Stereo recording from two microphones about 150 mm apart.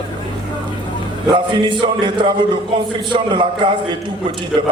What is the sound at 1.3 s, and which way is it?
Speech, 30° right (ahead or behind).